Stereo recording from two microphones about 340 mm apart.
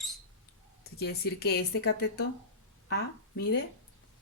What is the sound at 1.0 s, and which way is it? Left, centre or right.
Speech, left.